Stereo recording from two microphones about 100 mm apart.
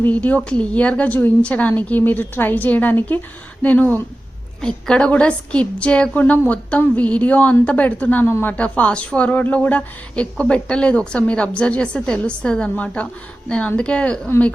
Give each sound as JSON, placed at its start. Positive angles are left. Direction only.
{"t": 0.0, "sound": "speech", "side_deg": 15}